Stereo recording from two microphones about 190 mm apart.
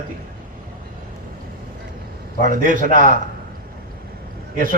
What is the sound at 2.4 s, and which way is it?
Speech, 45° right (ahead or behind).